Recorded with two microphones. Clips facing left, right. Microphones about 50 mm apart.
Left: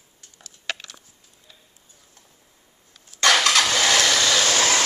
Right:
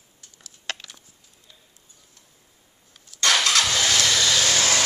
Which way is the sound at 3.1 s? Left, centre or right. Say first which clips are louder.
Left 3 dB; left.